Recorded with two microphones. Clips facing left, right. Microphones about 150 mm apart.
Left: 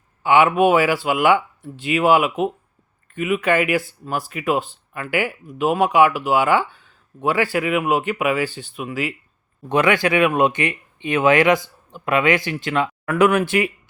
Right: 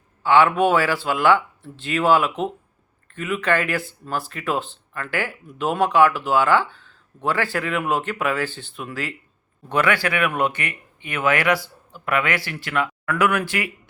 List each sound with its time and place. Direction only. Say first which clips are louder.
0.2 s speech: left 2 dB; 15° left (ahead or behind)